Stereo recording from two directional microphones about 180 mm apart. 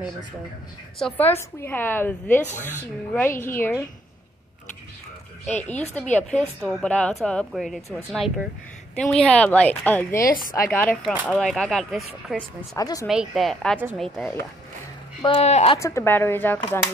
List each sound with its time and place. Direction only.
0.9 s a woman's voice: 5° left (ahead or behind)
5.9 s a woman's voice: 5° left (ahead or behind)
12.7 s speech: 20° left (ahead or behind)
13.0 s speech: 5° right (ahead or behind)
15.2 s speech: 35° left (ahead or behind)
15.8 s a woman's voice: 15° left (ahead or behind)